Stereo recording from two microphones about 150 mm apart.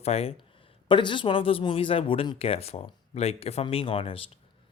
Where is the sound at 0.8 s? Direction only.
35° left (ahead or behind).